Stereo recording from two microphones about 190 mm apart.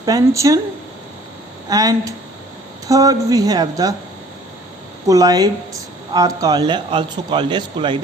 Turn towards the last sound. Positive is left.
turn(degrees=-25)  # may be behind; listen again after turning